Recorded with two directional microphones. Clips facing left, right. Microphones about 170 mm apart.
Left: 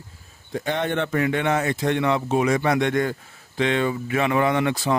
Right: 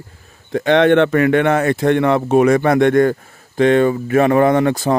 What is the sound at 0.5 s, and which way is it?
Speech, 80° right.